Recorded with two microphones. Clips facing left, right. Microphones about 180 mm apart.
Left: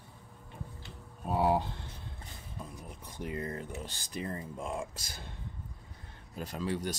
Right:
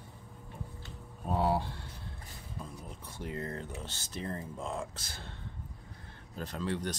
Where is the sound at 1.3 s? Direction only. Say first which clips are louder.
Left 2 dB; 15° left (ahead or behind).